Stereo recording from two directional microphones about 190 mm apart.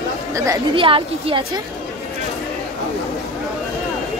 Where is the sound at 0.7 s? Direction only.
30° right (ahead or behind).